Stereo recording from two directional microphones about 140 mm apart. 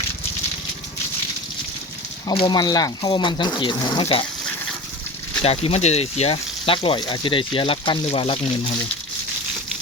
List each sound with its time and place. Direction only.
2.3 s speech: 35° left (ahead or behind)
5.4 s speech: 45° left (ahead or behind)